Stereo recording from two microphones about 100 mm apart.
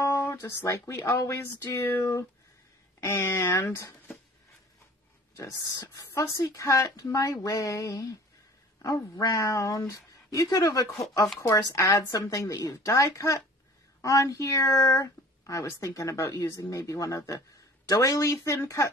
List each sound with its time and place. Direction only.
0.0 s speech: 30° left (ahead or behind)
5.3 s speech: 30° left (ahead or behind)